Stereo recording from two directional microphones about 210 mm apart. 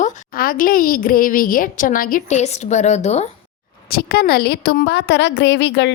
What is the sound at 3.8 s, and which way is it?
A woman's voice, 45° left (ahead or behind).